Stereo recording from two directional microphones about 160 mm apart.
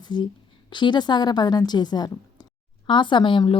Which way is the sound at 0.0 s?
30° left (ahead or behind).